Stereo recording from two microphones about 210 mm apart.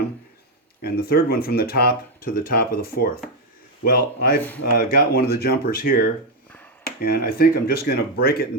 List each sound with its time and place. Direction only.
0.8 s speech: 45° left (ahead or behind)